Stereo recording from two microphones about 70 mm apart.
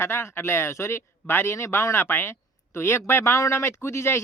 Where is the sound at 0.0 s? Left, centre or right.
Left.